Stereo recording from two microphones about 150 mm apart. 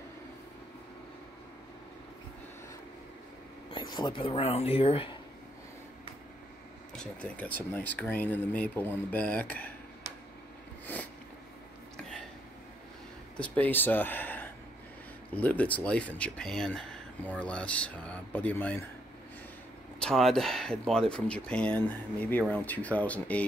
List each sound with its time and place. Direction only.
3.7 s speech: 30° left (ahead or behind)
6.9 s speech: 5° left (ahead or behind)
10.9 s a sound: 10° left (ahead or behind)
13.4 s speech: 10° left (ahead or behind)
20.0 s speech: 5° left (ahead or behind)